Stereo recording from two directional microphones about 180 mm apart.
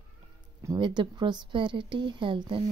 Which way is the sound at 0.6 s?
25° right (ahead or behind).